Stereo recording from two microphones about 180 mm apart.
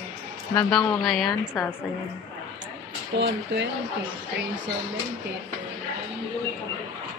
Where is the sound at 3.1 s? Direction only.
75° right (ahead or behind).